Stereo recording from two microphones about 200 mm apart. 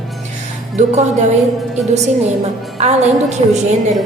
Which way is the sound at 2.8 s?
35° right (ahead or behind).